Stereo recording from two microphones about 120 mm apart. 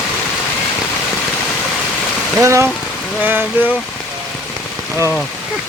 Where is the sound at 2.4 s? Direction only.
25° right (ahead or behind).